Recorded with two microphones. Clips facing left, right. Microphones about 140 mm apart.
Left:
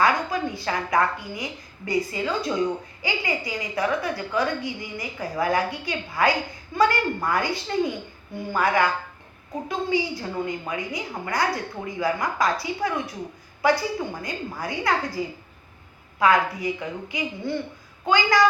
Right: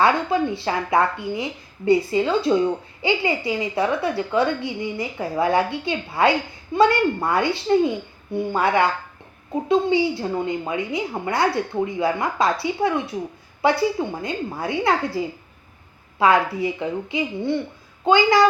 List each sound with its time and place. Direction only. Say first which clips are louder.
0.0 s a woman's voice: right 4 dB; 30° right (ahead or behind)